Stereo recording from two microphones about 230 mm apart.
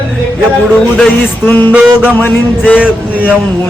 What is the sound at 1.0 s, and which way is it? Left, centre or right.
Music, centre.